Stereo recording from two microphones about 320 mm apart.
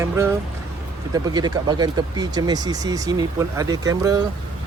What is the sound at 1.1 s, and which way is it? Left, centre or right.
Speech, centre.